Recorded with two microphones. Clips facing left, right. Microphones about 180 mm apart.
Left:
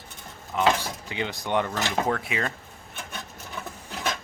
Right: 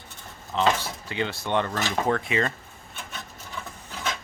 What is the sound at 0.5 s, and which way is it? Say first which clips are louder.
Speech: even; 10° left (ahead or behind).